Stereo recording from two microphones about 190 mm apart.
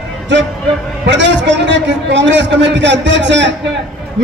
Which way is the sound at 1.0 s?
70° right (ahead or behind).